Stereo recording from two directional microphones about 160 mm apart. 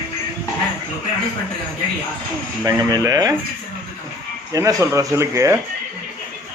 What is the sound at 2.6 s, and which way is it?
Speech, 20° right (ahead or behind).